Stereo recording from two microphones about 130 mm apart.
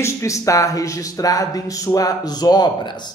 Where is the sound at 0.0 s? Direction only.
25° left (ahead or behind).